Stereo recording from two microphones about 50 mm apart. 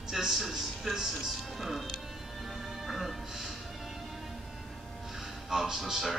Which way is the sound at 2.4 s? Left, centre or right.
Centre.